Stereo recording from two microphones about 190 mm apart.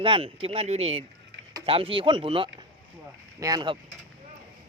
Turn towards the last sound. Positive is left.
turn(degrees=-20)  # may be behind; listen again after turning